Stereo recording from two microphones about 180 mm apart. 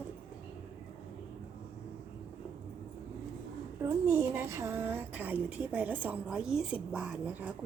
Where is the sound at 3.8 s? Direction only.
15° right (ahead or behind).